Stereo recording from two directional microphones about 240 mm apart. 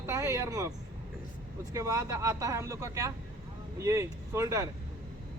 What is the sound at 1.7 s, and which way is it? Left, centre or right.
Speech, centre.